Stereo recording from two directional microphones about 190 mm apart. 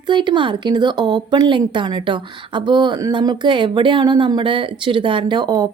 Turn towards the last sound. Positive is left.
turn(degrees=-20)  # may be behind; listen again after turning